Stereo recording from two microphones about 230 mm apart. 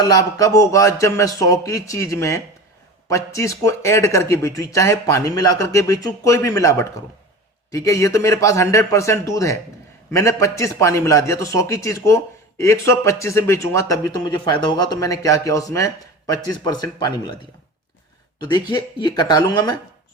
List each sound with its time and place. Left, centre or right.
0.0 s a man's voice: centre
18.3 s speech: centre